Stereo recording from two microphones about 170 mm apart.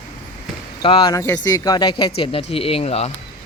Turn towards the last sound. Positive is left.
turn(degrees=40)  # may be behind; listen again after turning